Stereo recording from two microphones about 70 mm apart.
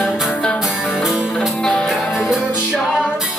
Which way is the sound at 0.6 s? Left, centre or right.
Centre.